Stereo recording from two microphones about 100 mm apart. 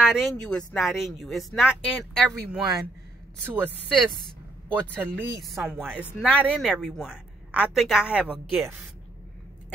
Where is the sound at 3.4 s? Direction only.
20° right (ahead or behind).